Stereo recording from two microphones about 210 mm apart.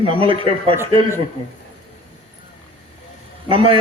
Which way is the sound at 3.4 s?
25° right (ahead or behind).